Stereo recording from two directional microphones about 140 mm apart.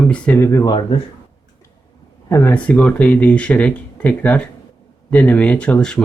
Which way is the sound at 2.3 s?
20° left (ahead or behind).